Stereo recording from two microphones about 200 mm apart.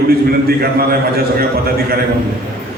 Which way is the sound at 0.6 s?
50° right (ahead or behind).